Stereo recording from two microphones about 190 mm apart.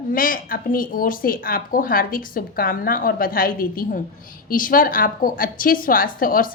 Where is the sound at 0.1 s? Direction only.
50° left (ahead or behind).